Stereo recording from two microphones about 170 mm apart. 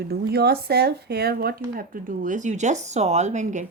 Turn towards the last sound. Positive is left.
turn(degrees=-45)  # may be behind; listen again after turning